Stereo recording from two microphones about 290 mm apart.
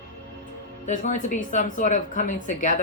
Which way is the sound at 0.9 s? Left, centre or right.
Left.